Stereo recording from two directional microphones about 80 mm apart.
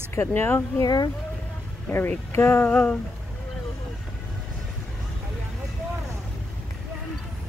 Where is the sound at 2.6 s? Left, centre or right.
Centre.